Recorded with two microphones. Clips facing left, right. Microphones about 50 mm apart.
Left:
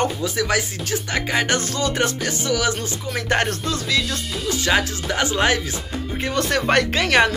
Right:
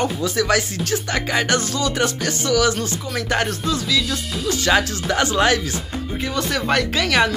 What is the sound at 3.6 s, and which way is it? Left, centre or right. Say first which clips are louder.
Speech: right 1 dB; left.